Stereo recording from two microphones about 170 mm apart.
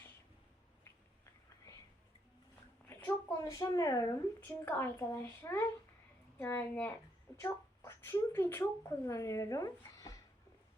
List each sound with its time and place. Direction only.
1.2 s whispering: 20° left (ahead or behind)
2.9 s a sound: 15° left (ahead or behind)
4.4 s a woman's voice: 10° left (ahead or behind)